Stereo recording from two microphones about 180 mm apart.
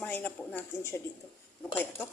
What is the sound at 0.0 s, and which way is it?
A woman's voice, 10° left (ahead or behind).